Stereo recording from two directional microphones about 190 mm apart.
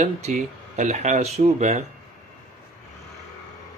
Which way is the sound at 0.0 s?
40° right (ahead or behind).